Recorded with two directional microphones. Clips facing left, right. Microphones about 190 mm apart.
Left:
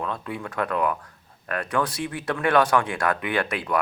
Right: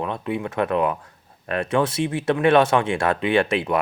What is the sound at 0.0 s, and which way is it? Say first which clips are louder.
Speech: right 5 dB; 20° right (ahead or behind).